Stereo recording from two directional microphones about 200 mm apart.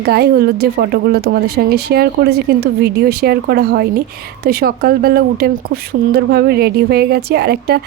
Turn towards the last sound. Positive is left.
turn(degrees=-55)  # may be behind; listen again after turning